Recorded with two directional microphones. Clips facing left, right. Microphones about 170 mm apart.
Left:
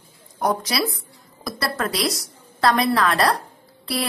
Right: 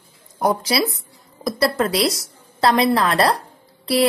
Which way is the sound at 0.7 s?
25° right (ahead or behind).